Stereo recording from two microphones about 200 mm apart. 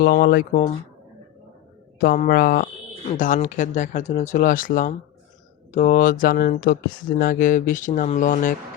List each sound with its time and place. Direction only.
0.0 s speech: 50° left (ahead or behind)
2.0 s speech: 45° left (ahead or behind)